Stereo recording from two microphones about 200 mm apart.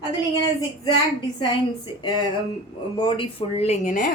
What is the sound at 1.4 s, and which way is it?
A woman's voice, 20° left (ahead or behind).